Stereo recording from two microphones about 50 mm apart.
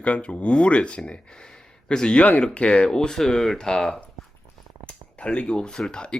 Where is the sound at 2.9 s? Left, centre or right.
Centre.